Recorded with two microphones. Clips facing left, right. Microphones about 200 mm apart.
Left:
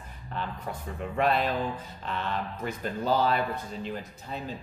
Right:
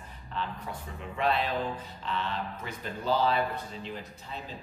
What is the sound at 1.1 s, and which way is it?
Speech, 50° left (ahead or behind).